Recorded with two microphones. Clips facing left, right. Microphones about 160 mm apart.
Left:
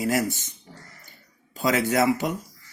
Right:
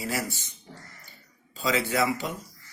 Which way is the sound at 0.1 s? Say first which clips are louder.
Left 6 dB; 45° left (ahead or behind).